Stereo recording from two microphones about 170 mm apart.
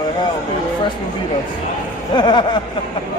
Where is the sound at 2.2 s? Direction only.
25° left (ahead or behind).